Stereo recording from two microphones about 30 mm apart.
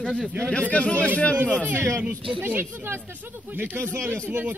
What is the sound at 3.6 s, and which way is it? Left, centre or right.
Speech, right.